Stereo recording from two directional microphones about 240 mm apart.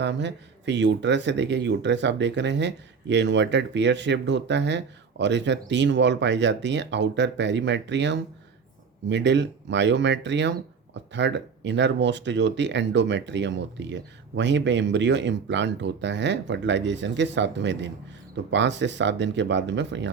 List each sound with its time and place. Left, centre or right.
0.0 s speech: right